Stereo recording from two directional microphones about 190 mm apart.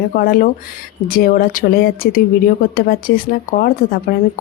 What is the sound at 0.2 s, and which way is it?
Speech, 50° left (ahead or behind).